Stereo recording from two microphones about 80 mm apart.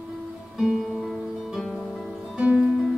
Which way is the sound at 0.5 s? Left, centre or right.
Centre.